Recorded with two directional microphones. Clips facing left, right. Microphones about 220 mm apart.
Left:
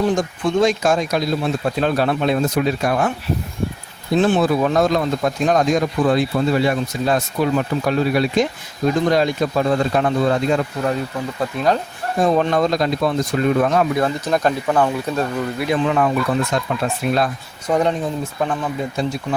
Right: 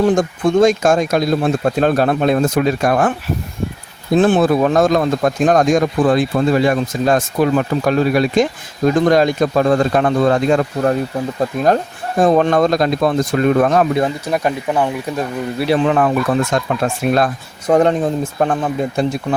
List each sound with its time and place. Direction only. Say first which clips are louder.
0.2 s speech: right 5 dB; 50° right (ahead or behind)
14.3 s speech: even; 10° right (ahead or behind)
15.5 s speech: right 6 dB; 35° right (ahead or behind)
15.8 s speech: right 3 dB; 50° right (ahead or behind)